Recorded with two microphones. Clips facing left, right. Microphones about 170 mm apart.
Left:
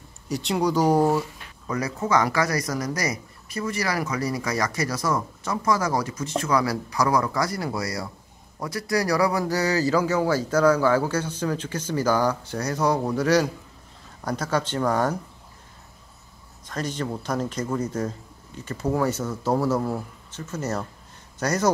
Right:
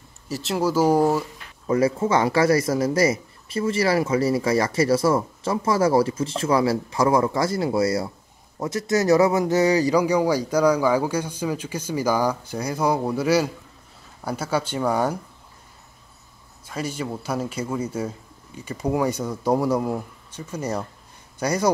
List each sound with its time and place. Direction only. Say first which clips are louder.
0.3 s speech: even; 5° right (ahead or behind)
1.7 s speech: right 5 dB; 25° right (ahead or behind); by 15.1 s 10° right (ahead or behind)
16.6 s speech: even; 10° right (ahead or behind)